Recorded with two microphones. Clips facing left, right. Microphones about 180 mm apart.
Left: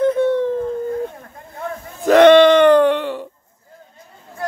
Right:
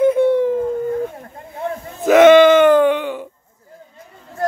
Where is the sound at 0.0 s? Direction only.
10° right (ahead or behind).